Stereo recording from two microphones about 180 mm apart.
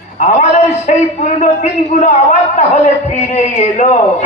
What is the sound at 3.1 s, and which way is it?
Speech, 35° left (ahead or behind).